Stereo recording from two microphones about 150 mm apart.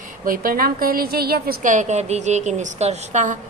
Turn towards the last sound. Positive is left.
turn(degrees=-55)  # may be behind; listen again after turning